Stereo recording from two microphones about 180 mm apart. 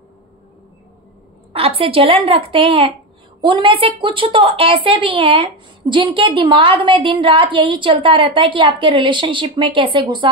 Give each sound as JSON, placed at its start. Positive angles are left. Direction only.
{"t": 1.5, "sound": "a woman's voice", "side_deg": -30}